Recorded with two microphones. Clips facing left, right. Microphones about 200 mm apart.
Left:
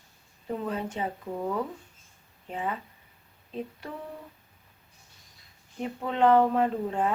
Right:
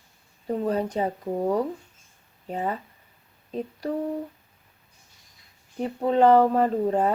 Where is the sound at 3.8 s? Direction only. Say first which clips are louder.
Right 11 dB; 35° right (ahead or behind).